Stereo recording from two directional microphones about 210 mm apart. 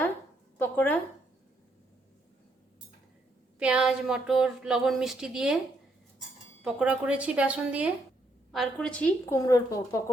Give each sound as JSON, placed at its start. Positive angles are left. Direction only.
{"t": 0.6, "sound": "a sound", "side_deg": 10}
{"t": 3.6, "sound": "speech", "side_deg": -5}
{"t": 6.7, "sound": "speech", "side_deg": -5}
{"t": 8.5, "sound": "a woman's voice", "side_deg": 5}